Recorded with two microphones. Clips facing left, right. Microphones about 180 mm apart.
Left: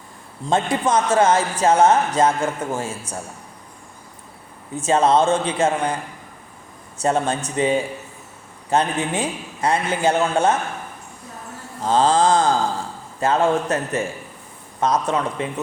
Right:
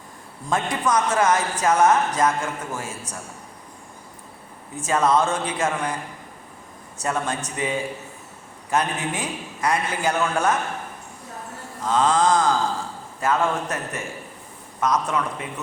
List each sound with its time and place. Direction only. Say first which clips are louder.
0.4 s a man's voice: left 4 dB; 25° left (ahead or behind)
4.8 s a man's voice: left 4 dB; 25° left (ahead or behind)
7.0 s a man's voice: left 6 dB; 30° left (ahead or behind)
11.8 s a man's voice: left 3 dB; 30° left (ahead or behind)